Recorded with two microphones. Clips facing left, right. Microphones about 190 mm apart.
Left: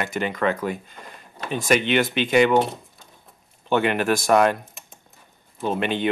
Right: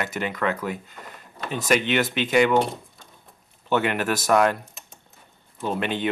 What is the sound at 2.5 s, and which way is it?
Speech, centre (ahead or behind).